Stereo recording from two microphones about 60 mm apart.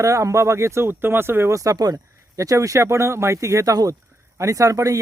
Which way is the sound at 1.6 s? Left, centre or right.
Right.